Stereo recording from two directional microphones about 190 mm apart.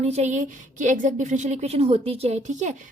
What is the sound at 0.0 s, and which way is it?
Speech, 35° right (ahead or behind).